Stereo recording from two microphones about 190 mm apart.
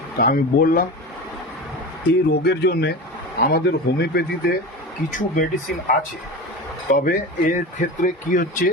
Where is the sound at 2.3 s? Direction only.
55° left (ahead or behind).